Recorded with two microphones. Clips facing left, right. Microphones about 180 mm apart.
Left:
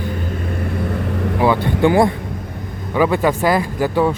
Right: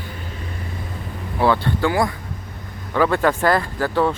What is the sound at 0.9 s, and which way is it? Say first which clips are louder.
Vehicle: left 11 dB; 75° left (ahead or behind).